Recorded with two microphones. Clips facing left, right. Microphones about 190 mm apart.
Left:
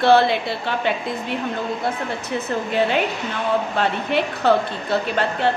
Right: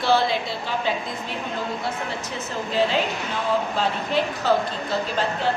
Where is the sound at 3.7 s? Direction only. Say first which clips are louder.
Left 3 dB; 65° left (ahead or behind).